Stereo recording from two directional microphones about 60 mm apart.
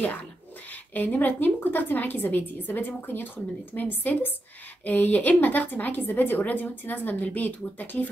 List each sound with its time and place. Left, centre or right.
0.9 s a woman's voice: left